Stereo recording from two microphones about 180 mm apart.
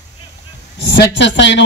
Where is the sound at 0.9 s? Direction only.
75° left (ahead or behind).